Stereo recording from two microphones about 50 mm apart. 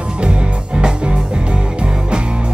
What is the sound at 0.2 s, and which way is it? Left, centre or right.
Music, centre.